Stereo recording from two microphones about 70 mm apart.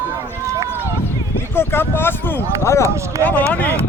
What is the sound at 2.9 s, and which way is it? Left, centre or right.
Speech, right.